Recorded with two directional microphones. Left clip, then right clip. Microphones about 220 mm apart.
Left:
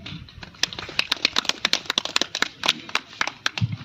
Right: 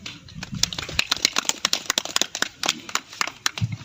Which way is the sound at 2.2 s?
20° right (ahead or behind).